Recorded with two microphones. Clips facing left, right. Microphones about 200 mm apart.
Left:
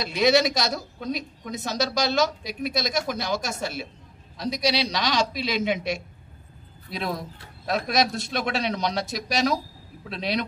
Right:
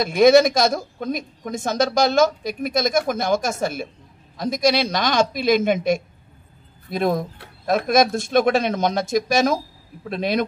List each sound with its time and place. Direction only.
0.0 s a woman's voice: 50° right (ahead or behind)